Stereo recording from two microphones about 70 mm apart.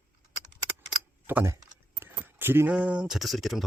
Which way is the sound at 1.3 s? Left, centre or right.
Right.